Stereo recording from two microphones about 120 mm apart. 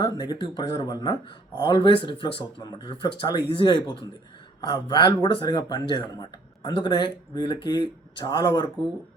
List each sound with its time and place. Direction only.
0.0 s speech: 35° left (ahead or behind)
0.9 s speech: 30° left (ahead or behind)
1.6 s speech: 40° left (ahead or behind)